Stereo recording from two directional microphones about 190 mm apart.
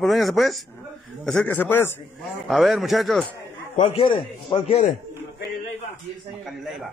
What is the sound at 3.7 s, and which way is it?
Speech, 30° left (ahead or behind).